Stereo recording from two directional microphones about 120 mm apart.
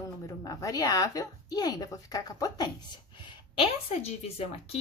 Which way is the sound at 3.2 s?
45° left (ahead or behind).